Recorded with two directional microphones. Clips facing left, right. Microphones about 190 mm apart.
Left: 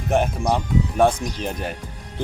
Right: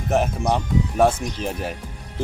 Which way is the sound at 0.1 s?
Centre (ahead or behind).